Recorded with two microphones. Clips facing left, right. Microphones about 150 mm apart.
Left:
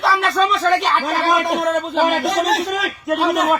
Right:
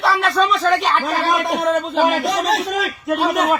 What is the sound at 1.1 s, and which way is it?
Speech, 50° left (ahead or behind).